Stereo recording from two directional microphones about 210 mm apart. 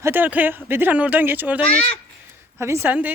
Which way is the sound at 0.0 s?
10° right (ahead or behind).